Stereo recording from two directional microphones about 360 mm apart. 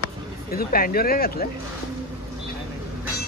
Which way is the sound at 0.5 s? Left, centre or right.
Left.